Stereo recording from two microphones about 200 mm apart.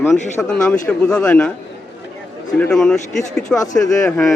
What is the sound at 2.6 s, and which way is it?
A man's voice, 5° left (ahead or behind).